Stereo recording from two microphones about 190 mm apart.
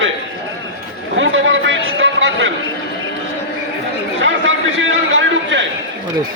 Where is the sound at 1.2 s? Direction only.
80° right.